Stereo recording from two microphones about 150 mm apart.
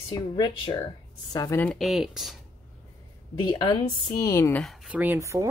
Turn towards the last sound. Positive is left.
turn(degrees=-20)  # may be behind; listen again after turning